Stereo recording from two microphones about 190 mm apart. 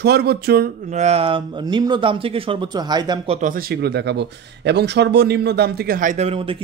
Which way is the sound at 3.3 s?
40° right (ahead or behind).